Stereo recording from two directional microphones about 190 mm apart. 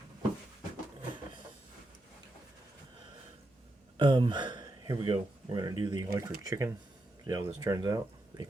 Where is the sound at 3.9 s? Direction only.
25° right (ahead or behind).